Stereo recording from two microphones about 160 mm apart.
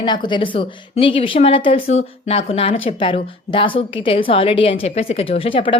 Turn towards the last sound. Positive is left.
turn(degrees=35)  # may be behind; listen again after turning